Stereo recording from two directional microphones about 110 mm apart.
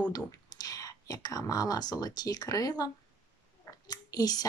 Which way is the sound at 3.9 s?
35° left (ahead or behind).